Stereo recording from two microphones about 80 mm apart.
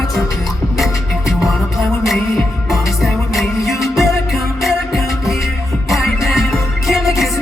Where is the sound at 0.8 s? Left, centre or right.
Centre.